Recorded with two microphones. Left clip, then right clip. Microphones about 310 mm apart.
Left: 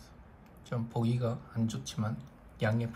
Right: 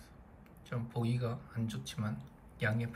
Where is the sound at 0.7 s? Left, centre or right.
Centre.